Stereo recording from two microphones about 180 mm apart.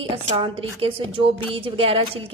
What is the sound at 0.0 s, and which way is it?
A woman's voice, 30° right (ahead or behind).